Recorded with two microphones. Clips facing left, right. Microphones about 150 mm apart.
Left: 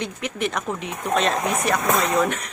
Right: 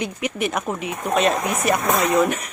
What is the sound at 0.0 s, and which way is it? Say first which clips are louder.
A woman's voice: right 2 dB; 10° right (ahead or behind).